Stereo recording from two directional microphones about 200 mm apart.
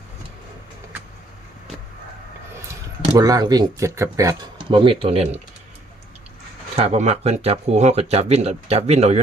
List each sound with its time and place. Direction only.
3.2 s speech: 20° right (ahead or behind)
6.7 s speech: 30° right (ahead or behind)